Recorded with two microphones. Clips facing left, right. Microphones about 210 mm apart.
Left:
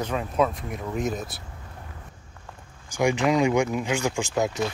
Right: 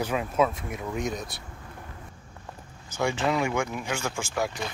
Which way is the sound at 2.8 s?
15° left (ahead or behind).